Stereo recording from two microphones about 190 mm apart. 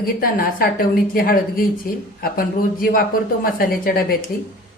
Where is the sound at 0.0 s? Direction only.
50° left (ahead or behind).